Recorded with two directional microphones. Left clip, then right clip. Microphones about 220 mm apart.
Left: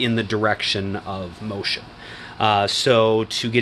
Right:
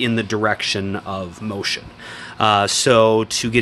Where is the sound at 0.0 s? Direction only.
10° right (ahead or behind).